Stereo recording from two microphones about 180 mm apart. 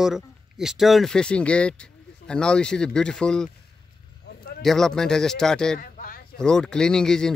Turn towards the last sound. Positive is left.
turn(degrees=5)  # may be behind; listen again after turning